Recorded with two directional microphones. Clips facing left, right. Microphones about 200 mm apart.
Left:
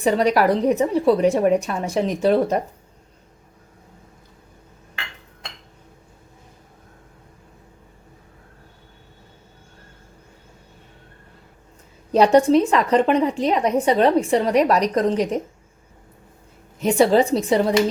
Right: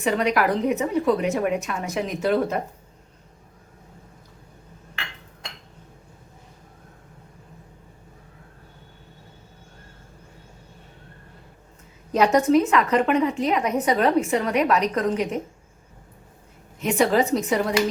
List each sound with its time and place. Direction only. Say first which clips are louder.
0.0 s a woman's voice: left 4 dB; 35° left (ahead or behind)
12.1 s a woman's voice: left 4 dB; 30° left (ahead or behind)
16.8 s a woman's voice: left 4 dB; 30° left (ahead or behind)